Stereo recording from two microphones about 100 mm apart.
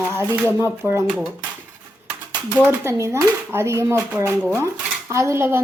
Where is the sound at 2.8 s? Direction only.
25° right (ahead or behind).